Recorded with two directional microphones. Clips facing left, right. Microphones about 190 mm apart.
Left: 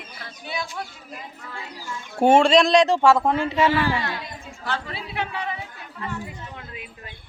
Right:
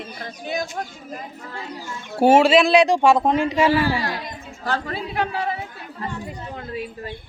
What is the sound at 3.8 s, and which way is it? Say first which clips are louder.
Speech: right 2 dB; 40° right (ahead or behind).